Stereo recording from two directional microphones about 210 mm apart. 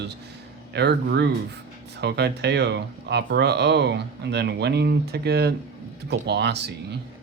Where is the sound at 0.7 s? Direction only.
50° right (ahead or behind).